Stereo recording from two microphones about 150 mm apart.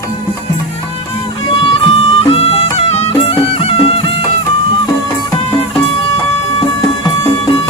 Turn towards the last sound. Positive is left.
turn(degrees=30)  # may be behind; listen again after turning